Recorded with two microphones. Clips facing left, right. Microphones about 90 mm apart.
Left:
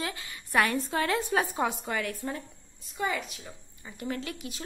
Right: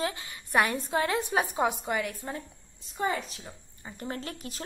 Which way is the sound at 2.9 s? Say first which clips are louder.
Right 1 dB; 35° right (ahead or behind).